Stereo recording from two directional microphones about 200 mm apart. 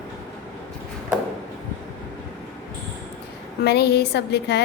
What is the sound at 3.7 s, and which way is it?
Speech, 55° left (ahead or behind).